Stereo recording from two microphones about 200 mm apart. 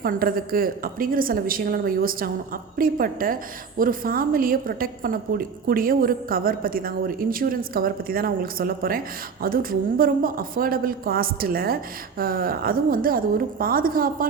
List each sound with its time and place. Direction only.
0.0 s a woman's voice: 45° right (ahead or behind)